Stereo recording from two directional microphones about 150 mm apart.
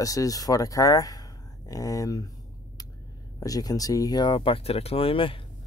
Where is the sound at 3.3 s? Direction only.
25° left (ahead or behind).